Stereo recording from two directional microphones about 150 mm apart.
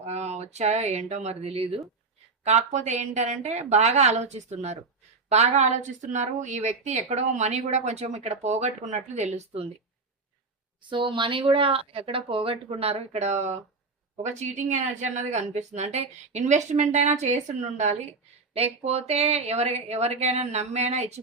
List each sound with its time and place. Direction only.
0.0 s a woman's voice: 50° right (ahead or behind)
10.8 s a woman's voice: 35° right (ahead or behind)